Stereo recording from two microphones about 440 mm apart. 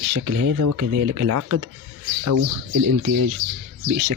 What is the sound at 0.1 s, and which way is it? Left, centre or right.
Speech, right.